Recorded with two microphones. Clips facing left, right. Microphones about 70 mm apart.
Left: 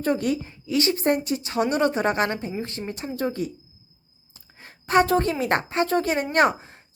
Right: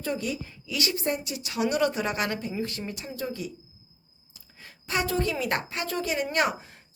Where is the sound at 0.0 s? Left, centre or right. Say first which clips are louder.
Left 7 dB; left.